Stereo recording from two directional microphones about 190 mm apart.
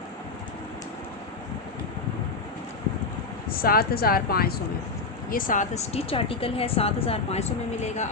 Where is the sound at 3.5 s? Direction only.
50° left (ahead or behind).